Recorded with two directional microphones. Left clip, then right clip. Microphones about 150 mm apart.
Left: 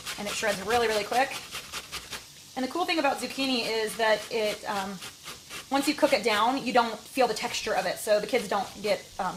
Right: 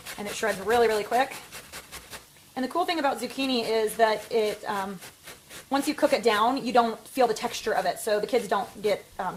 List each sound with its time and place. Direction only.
0.4 s a woman's voice: 40° right (ahead or behind)
2.6 s a woman's voice: 40° right (ahead or behind)